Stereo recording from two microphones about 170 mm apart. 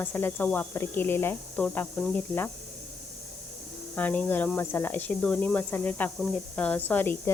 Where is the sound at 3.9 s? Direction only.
10° left (ahead or behind).